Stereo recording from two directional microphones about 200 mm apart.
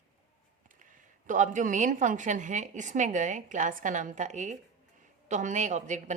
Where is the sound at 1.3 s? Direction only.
40° right (ahead or behind).